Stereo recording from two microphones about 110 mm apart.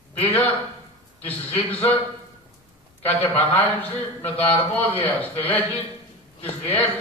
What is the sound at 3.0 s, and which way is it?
A man's voice, 20° left (ahead or behind).